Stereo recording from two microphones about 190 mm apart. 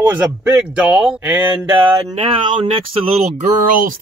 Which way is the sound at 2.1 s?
30° right (ahead or behind).